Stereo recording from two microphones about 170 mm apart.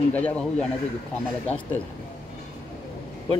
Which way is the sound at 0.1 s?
5° left (ahead or behind).